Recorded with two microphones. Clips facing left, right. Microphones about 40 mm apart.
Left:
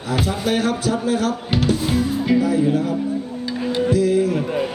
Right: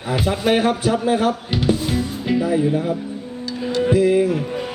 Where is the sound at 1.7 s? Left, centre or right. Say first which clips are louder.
Left 2 dB; centre.